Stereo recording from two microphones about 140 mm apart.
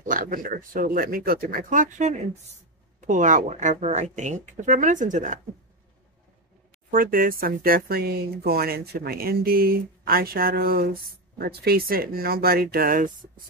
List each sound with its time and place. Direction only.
0.0 s speech: 75° right (ahead or behind)
6.9 s speech: 80° right